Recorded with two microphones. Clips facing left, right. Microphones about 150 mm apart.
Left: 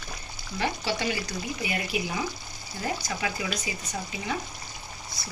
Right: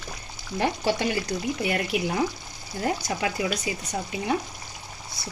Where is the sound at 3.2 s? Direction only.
50° right (ahead or behind).